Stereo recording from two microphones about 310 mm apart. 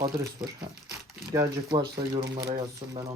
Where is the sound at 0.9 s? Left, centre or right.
Centre.